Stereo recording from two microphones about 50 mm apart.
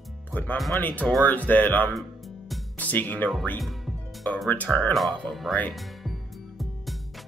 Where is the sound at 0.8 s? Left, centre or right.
Left.